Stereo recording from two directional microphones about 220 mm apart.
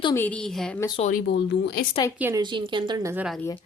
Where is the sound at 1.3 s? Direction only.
50° left (ahead or behind).